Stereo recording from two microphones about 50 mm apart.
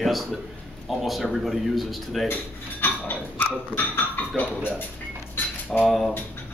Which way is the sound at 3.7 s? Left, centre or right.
Left.